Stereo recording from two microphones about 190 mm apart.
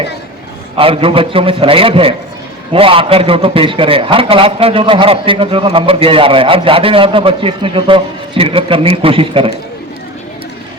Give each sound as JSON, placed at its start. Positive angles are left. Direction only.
{"t": 0.8, "sound": "a man's voice", "side_deg": -30}